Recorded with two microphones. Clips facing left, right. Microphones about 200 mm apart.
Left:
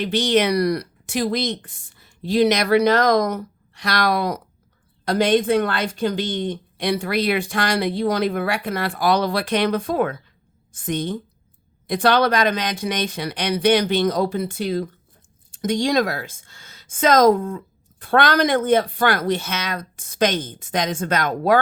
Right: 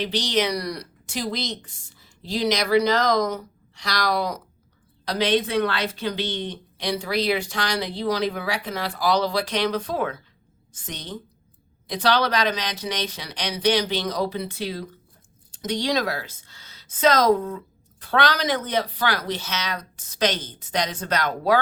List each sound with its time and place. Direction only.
0.0 s a woman's voice: 55° left (ahead or behind)